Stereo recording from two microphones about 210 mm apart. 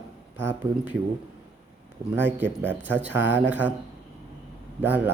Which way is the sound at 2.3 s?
10° right (ahead or behind).